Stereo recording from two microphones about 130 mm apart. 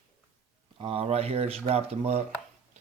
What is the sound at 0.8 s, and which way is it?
Speech, 45° right (ahead or behind).